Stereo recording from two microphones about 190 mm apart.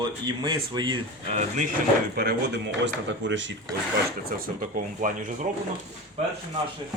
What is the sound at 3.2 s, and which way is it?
Speech, 75° right (ahead or behind).